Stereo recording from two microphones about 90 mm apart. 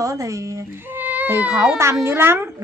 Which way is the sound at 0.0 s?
35° right (ahead or behind).